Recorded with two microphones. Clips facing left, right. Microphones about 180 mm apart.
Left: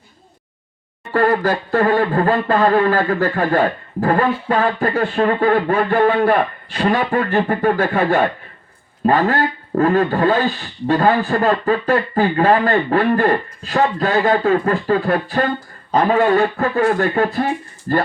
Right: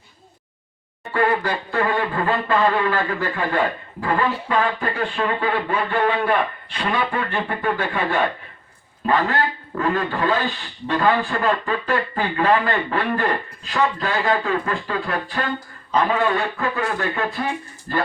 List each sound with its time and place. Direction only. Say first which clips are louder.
1.1 s speech: left 5 dB; 45° left (ahead or behind)